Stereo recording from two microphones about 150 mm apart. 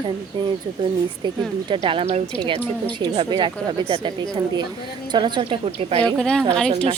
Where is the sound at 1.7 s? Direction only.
35° right (ahead or behind).